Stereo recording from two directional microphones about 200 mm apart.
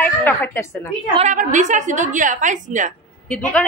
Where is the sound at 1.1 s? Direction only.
35° right (ahead or behind).